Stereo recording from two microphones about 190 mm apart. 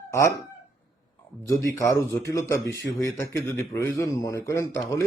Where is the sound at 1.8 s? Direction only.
15° left (ahead or behind).